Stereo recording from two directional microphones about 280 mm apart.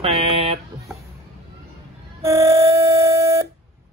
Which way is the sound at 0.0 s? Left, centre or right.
Right.